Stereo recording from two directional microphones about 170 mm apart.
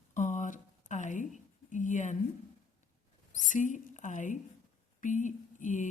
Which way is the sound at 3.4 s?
50° left (ahead or behind).